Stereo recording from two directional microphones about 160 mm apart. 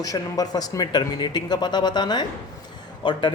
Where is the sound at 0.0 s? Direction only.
25° left (ahead or behind).